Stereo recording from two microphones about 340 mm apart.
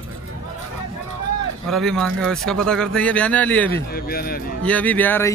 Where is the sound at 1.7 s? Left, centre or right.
Centre.